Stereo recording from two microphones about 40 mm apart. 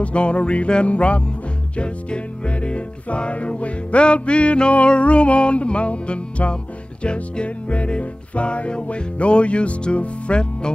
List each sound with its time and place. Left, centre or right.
0.0 s music: left